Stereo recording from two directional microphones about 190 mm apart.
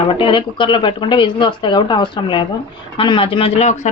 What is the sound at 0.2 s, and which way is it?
Speech, 25° left (ahead or behind).